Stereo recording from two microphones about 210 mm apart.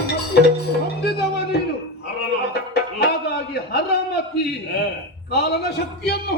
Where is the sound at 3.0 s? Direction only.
50° left (ahead or behind).